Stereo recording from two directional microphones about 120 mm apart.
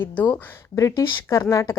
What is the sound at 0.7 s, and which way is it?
A woman's voice, 25° left (ahead or behind).